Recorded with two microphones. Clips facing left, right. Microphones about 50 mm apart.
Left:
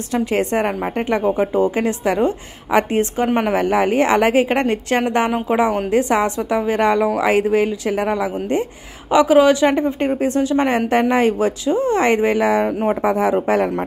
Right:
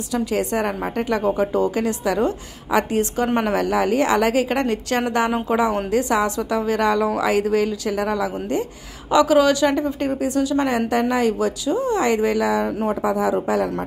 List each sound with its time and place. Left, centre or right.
0.1 s a woman's voice: left